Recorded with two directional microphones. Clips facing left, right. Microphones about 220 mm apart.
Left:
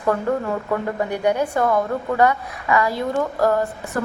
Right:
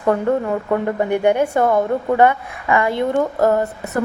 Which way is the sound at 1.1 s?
25° right (ahead or behind).